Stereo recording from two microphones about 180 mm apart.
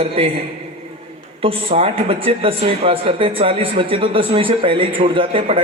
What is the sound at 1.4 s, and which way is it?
Speech, 30° right (ahead or behind).